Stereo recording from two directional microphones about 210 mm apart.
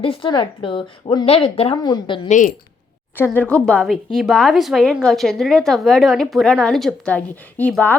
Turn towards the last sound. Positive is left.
turn(degrees=5)  # may be behind; listen again after turning